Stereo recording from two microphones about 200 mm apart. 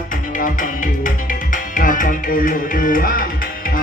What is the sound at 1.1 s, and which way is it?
Music, 40° left (ahead or behind).